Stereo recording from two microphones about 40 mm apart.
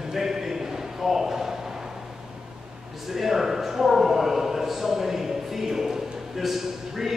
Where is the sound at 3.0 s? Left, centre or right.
Centre.